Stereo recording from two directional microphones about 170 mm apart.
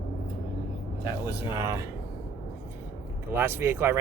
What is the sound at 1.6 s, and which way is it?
Speech, 15° right (ahead or behind).